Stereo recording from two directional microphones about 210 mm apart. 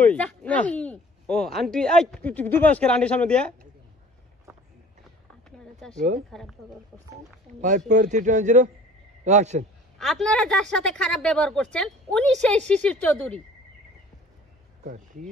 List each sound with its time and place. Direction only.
0.0 s speech: 5° left (ahead or behind)
5.6 s a sound: 5° left (ahead or behind)
5.9 s speech: 35° right (ahead or behind)
6.6 s speech: centre (ahead or behind)
7.9 s speech: 35° right (ahead or behind)
9.9 s speech: centre (ahead or behind)
14.8 s speech: 40° right (ahead or behind)